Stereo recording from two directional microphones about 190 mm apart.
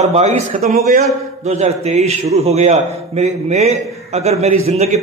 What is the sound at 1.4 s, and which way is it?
A man's voice, 35° right (ahead or behind).